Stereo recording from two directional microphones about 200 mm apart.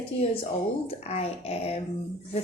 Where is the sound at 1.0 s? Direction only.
30° left (ahead or behind).